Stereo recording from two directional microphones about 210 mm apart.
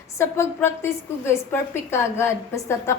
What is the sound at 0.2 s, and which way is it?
A woman's voice, 10° left (ahead or behind).